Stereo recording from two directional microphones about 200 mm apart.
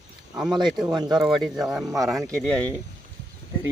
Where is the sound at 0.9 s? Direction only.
20° right (ahead or behind).